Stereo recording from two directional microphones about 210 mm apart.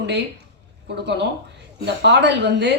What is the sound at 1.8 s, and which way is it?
Speech, 55° right (ahead or behind).